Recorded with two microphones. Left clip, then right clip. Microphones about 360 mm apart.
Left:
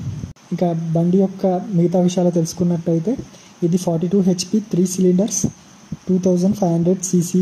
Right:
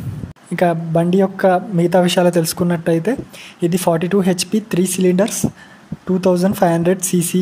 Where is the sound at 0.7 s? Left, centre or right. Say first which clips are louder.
Right 4 dB; right.